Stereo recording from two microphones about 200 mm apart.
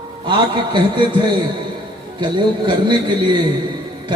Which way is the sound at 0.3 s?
25° right (ahead or behind).